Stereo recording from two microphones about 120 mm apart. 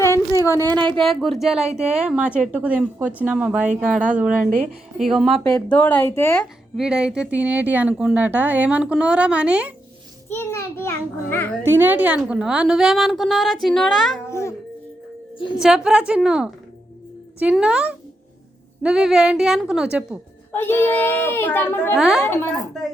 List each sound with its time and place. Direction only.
0.0 s a sound: 25° left (ahead or behind)
0.6 s speech: 35° right (ahead or behind)
1.0 s a woman's voice: centre (ahead or behind)
5.4 s speech: 15° left (ahead or behind)
6.7 s speech: 5° right (ahead or behind)
10.2 s a child's voice: 20° left (ahead or behind)
11.6 s a woman's voice: 15° right (ahead or behind); by 14.2 s 5° left (ahead or behind)
14.3 s a child's voice: 25° left (ahead or behind)
15.6 s speech: 5° right (ahead or behind)
17.5 s a woman's voice: 5° right (ahead or behind)
20.5 s speech: 20° left (ahead or behind)
21.9 s a woman's voice: 5° right (ahead or behind)